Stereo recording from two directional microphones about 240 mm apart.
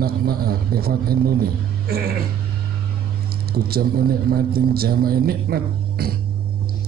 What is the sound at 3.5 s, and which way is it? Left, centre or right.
Speech, right.